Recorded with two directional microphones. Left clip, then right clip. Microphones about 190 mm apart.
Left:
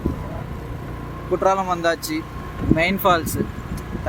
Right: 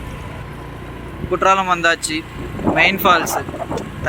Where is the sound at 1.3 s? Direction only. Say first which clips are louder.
Right 4 dB; 5° left (ahead or behind).